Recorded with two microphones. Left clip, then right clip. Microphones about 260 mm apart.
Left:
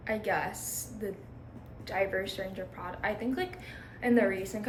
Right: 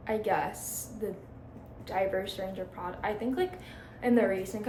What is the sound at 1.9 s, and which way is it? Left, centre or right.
A woman's voice, centre.